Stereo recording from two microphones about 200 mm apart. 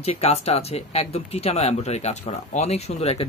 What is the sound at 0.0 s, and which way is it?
Speech, 30° left (ahead or behind).